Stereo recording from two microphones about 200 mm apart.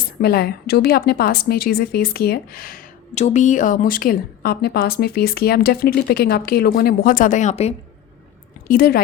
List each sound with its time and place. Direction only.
0.2 s a woman's voice: 50° left (ahead or behind); by 7.8 s 30° left (ahead or behind)
8.6 s speech: 45° left (ahead or behind)